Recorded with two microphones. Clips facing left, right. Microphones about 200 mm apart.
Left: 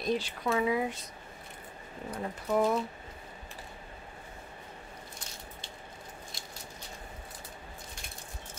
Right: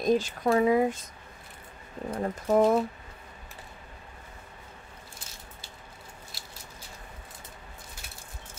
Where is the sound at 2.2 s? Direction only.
45° right (ahead or behind).